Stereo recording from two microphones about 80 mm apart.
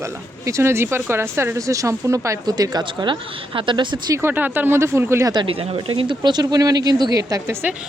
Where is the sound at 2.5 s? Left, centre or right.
Right.